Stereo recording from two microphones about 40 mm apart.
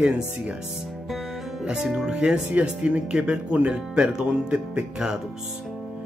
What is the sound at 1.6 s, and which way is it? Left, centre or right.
Speech, centre.